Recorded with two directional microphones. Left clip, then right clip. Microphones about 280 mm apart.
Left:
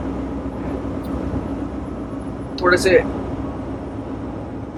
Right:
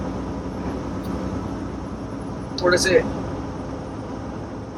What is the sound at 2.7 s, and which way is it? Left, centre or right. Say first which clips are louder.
Speech: left 3 dB; left.